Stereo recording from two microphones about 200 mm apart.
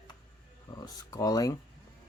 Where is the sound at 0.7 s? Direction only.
20° left (ahead or behind).